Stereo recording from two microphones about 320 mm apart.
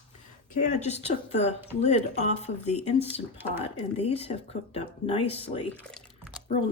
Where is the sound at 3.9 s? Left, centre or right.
Centre.